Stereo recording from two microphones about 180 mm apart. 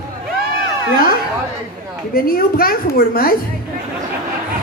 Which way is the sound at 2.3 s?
55° left (ahead or behind).